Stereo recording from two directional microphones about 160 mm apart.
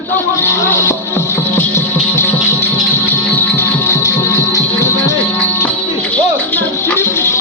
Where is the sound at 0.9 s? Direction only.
15° left (ahead or behind).